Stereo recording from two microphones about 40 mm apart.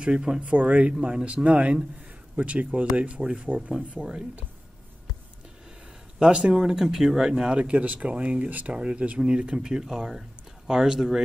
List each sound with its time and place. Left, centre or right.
0.0 s speech: right
0.4 s speech: right
0.9 s speech: right
1.2 s speech: right
6.1 s speech: right
7.5 s speech: right
8.7 s speech: right; by 11.2 s centre